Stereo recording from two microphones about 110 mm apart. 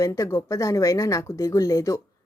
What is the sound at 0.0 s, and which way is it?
Speech, 25° left (ahead or behind).